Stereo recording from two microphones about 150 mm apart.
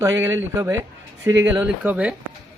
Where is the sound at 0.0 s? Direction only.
20° right (ahead or behind).